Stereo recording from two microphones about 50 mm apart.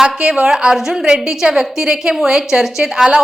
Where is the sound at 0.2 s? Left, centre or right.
Right.